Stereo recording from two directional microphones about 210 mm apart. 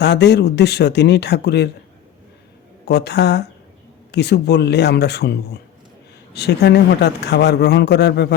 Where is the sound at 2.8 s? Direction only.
55° left (ahead or behind).